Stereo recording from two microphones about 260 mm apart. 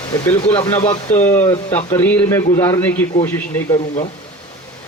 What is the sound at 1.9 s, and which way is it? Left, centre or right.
Speech, centre.